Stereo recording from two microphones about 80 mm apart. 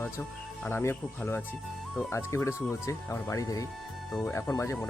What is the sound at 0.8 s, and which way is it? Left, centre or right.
Speech, left.